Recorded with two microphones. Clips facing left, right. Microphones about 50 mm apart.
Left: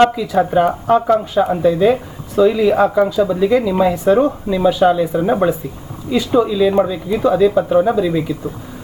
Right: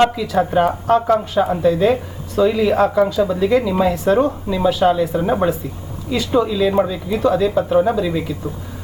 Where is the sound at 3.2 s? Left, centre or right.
Centre.